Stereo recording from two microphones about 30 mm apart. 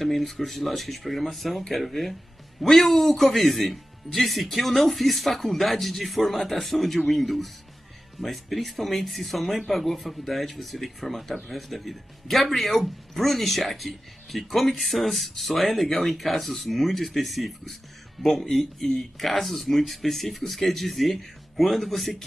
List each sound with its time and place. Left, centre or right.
0.0 s speech: centre